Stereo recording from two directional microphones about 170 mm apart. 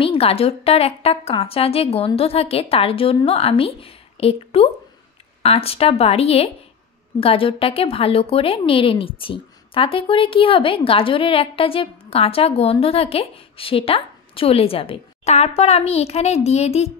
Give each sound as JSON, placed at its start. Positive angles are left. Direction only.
{"t": 0.0, "sound": "a woman's voice", "side_deg": 35}